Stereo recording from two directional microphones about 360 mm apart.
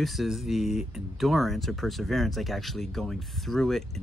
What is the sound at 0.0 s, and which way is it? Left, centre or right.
Speech, centre.